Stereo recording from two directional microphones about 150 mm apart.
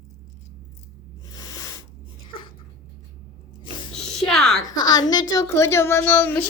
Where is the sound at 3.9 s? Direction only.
5° left (ahead or behind).